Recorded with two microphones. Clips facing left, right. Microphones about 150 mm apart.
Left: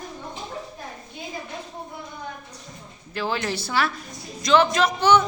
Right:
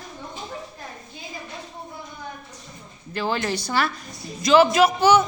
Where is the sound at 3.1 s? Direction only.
Centre (ahead or behind).